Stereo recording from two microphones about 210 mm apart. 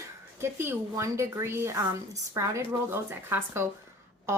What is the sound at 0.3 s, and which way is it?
A woman's voice, 10° right (ahead or behind).